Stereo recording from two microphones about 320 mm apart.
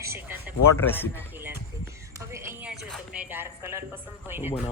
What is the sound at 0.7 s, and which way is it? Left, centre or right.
Speech, centre.